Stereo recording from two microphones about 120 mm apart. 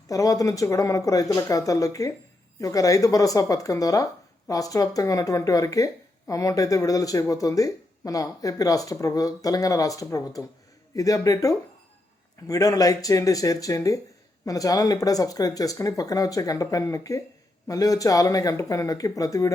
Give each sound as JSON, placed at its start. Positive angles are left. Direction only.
{"t": 0.1, "sound": "speech", "side_deg": 30}